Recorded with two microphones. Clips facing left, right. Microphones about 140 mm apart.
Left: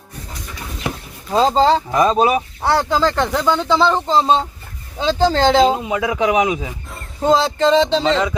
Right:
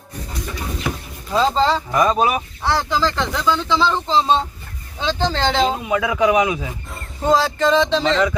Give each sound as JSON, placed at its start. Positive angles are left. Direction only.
{"t": 0.9, "sound": "vehicle", "side_deg": 35}
{"t": 1.9, "sound": "speech", "side_deg": 25}
{"t": 2.6, "sound": "speech", "side_deg": 50}